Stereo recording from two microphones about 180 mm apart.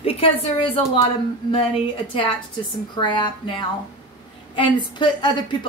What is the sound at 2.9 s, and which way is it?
A woman's voice, 25° left (ahead or behind).